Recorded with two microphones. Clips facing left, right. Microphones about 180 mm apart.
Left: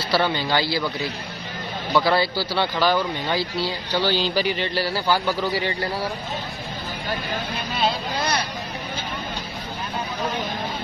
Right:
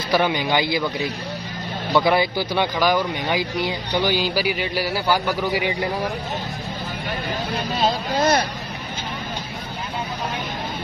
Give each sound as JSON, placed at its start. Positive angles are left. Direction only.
{"t": 0.1, "sound": "speech", "side_deg": -15}
{"t": 7.7, "sound": "speech", "side_deg": -45}